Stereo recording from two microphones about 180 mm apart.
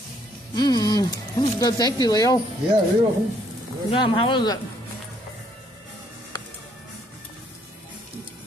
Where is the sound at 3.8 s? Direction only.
30° left (ahead or behind).